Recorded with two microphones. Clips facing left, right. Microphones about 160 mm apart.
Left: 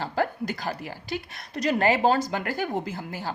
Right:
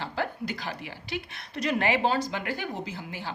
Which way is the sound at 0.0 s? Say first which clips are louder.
Left 5 dB; 45° left (ahead or behind).